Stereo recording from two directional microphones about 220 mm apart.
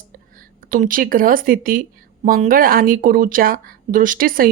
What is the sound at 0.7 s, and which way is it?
Speech, 40° right (ahead or behind).